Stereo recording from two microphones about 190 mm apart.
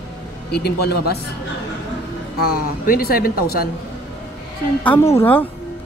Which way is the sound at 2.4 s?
55° left (ahead or behind).